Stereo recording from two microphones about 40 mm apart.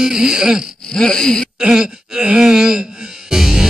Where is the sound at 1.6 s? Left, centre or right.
Centre.